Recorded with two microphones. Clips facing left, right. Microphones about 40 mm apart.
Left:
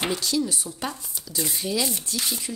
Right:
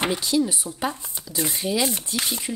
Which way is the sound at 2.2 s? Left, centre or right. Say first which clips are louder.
Right 3 dB; right.